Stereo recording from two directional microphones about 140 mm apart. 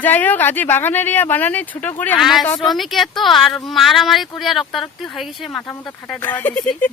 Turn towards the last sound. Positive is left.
turn(degrees=15)  # may be behind; listen again after turning